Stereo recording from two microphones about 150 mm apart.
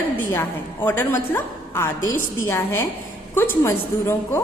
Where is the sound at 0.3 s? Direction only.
15° left (ahead or behind).